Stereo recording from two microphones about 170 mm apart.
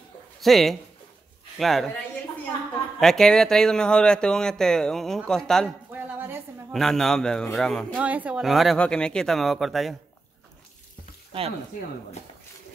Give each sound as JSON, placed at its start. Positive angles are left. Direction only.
{"t": 0.4, "sound": "speech", "side_deg": 0}
{"t": 3.0, "sound": "speech", "side_deg": 5}
{"t": 5.9, "sound": "a sound", "side_deg": -10}
{"t": 6.7, "sound": "speech", "side_deg": 0}
{"t": 7.9, "sound": "speech", "side_deg": -10}
{"t": 11.4, "sound": "speech", "side_deg": -35}